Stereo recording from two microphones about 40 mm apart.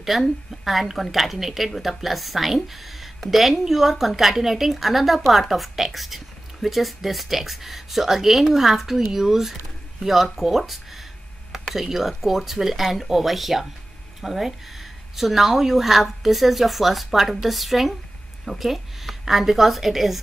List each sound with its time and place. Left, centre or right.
0.0 s speech: centre